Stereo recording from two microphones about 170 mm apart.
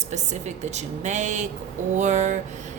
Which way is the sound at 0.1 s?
40° right (ahead or behind).